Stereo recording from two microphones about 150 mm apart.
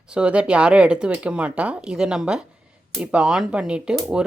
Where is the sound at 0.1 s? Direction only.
5° right (ahead or behind).